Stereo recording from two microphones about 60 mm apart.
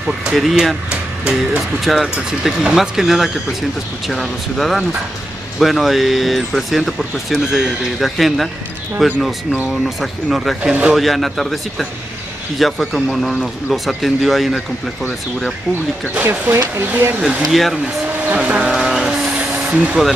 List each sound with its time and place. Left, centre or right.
0.0 s speech: centre
0.8 s music: centre
1.9 s speech: centre
10.6 s speech: centre
11.0 s speech: centre
16.2 s speech: right
17.5 s speech: centre
18.1 s speech: right
18.6 s a sound: centre